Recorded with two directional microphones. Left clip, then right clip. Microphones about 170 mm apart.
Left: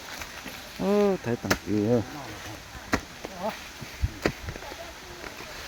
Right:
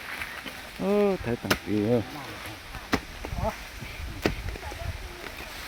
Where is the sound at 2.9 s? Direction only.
50° right (ahead or behind).